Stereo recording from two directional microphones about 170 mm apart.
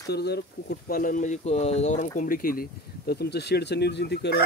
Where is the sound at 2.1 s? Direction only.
55° left (ahead or behind); by 4.4 s 80° left.